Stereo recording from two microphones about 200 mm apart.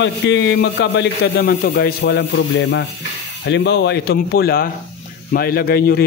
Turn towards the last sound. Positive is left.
turn(degrees=50)  # may be behind; listen again after turning